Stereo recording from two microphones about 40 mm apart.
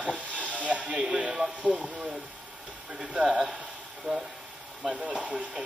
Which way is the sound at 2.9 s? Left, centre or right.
Right.